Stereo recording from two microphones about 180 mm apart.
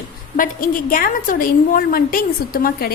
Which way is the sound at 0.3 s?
50° left (ahead or behind).